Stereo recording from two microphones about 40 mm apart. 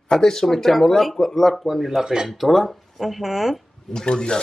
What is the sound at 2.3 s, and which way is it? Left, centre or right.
Speech, centre.